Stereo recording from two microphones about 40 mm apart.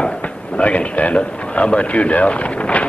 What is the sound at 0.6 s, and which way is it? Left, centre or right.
A man's voice, left.